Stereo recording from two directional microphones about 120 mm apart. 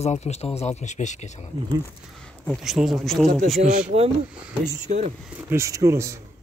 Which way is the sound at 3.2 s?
90° right.